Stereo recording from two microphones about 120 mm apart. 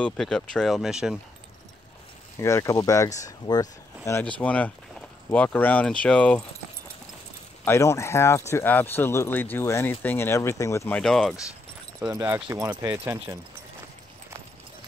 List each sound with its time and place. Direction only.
0.0 s speech: 5° left (ahead or behind)
2.4 s speech: 25° left (ahead or behind)
4.2 s speech: 10° left (ahead or behind)
7.6 s speech: 25° left (ahead or behind)
10.9 s speech: 5° left (ahead or behind)
12.5 s speech: 25° right (ahead or behind)